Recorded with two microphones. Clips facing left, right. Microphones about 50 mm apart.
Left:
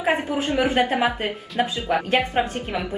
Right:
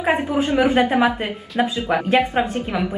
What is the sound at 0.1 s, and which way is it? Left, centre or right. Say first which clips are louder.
A woman's voice: right 3 dB; centre.